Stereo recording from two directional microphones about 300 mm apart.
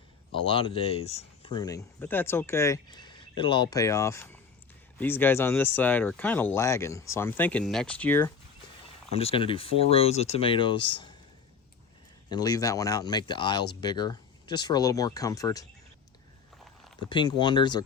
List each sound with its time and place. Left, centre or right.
0.3 s speech: centre
9.1 s speech: centre
12.3 s speech: centre
17.1 s speech: centre